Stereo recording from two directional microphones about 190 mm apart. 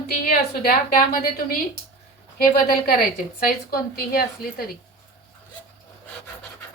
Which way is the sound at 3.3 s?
50° left (ahead or behind).